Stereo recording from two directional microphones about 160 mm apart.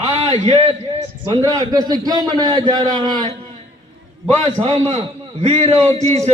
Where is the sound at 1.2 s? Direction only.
25° right (ahead or behind).